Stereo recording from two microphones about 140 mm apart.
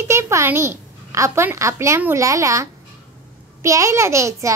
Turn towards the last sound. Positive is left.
turn(degrees=-20)  # may be behind; listen again after turning